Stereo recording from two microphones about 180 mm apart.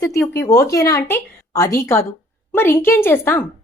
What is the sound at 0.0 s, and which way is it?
A woman's voice, 15° left (ahead or behind).